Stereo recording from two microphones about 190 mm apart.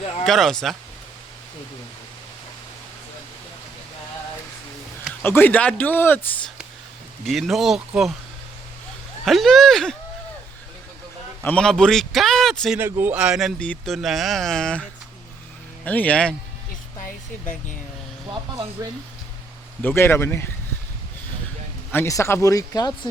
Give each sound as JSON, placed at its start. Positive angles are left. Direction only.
{"t": 0.3, "sound": "speech", "side_deg": 0}
{"t": 5.2, "sound": "speech", "side_deg": 10}
{"t": 7.3, "sound": "speech", "side_deg": 0}
{"t": 9.2, "sound": "speech", "side_deg": 0}
{"t": 11.4, "sound": "speech", "side_deg": 5}
{"t": 12.8, "sound": "speech", "side_deg": -10}
{"t": 19.8, "sound": "speech", "side_deg": 10}
{"t": 21.9, "sound": "speech", "side_deg": 15}